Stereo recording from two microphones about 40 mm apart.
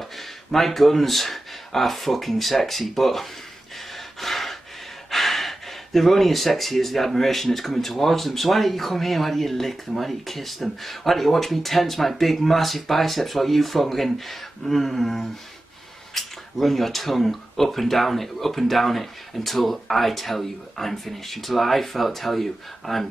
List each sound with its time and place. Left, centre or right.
0.0 s speech: centre
3.9 s gasp: centre
5.1 s speech: centre